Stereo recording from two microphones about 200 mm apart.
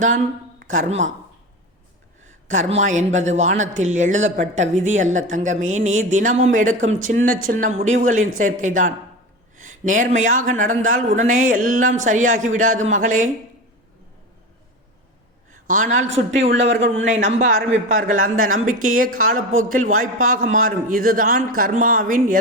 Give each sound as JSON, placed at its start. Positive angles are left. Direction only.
{"t": 0.6, "sound": "speech", "side_deg": -40}
{"t": 2.5, "sound": "speech", "side_deg": -35}
{"t": 15.6, "sound": "speech", "side_deg": -40}
{"t": 16.3, "sound": "a man's voice", "side_deg": -70}
{"t": 16.9, "sound": "a man's voice", "side_deg": -35}